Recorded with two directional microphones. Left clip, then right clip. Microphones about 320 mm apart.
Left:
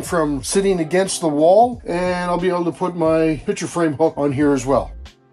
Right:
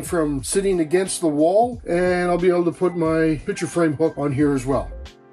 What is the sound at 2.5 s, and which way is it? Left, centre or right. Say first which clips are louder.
Speech: right 1 dB; centre.